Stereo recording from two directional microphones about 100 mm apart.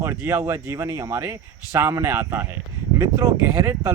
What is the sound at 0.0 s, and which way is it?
Speech, 25° right (ahead or behind).